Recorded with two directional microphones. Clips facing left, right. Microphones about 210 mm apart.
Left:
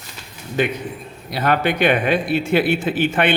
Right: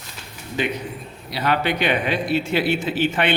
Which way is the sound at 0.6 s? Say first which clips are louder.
Left 4 dB; 50° left (ahead or behind).